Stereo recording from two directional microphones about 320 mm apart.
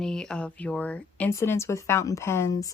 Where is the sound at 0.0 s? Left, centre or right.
Centre.